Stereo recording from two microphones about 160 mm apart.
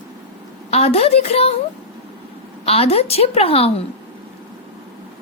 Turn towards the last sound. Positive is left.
turn(degrees=40)  # may be behind; listen again after turning